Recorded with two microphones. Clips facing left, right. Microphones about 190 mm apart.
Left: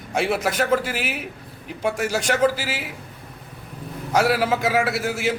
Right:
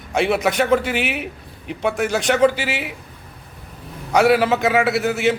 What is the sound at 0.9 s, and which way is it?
Speech, 65° right (ahead or behind).